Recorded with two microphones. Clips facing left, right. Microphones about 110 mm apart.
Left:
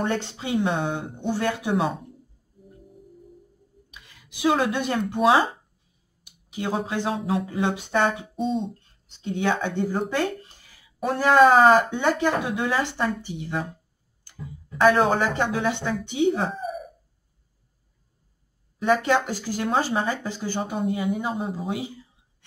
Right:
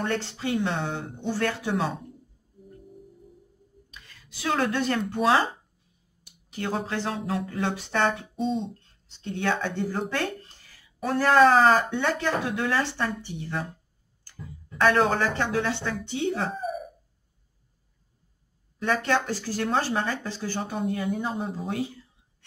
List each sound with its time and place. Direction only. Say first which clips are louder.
0.0 s speech: left 2 dB; 15° left (ahead or behind)
3.9 s speech: left 1 dB; 15° left (ahead or behind)
6.2 s a sound: left 2 dB; 15° left (ahead or behind)
6.9 s speech: left 3 dB; 15° left (ahead or behind)
16.4 s a sound: left 1 dB; centre (ahead or behind)
18.8 s speech: left 4 dB; 15° left (ahead or behind)